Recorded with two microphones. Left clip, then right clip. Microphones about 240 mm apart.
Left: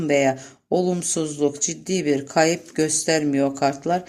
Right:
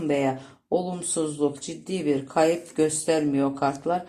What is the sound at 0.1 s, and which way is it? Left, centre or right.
Speech, left.